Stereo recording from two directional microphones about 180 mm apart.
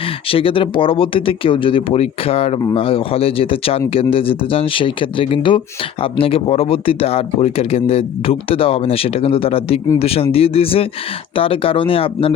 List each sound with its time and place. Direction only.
0.3 s speech: 30° left (ahead or behind)